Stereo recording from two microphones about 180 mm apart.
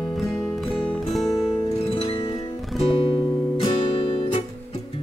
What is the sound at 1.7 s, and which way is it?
Music, 35° left (ahead or behind).